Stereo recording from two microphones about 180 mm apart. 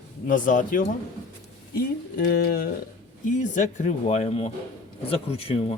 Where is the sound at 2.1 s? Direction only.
55° left (ahead or behind).